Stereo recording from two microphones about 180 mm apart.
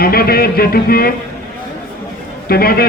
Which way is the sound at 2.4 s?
60° left (ahead or behind).